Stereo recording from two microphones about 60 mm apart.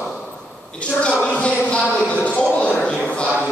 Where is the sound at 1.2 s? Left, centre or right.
Centre.